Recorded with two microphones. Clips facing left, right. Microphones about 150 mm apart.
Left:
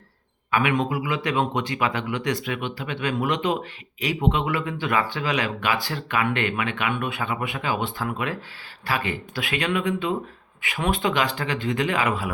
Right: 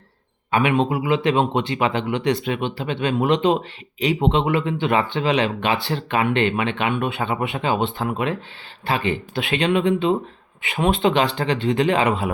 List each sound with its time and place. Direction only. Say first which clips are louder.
0.5 s a man's voice: right 4 dB; 25° right (ahead or behind)